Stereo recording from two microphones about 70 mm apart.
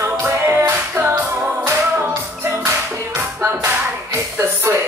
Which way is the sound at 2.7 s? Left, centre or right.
Right.